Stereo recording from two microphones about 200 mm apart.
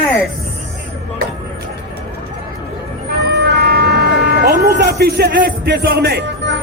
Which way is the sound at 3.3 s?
55° right (ahead or behind).